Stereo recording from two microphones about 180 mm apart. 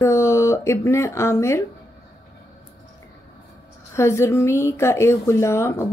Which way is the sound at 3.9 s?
15° left (ahead or behind).